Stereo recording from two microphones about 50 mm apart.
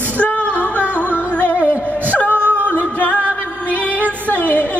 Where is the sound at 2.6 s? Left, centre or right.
Left.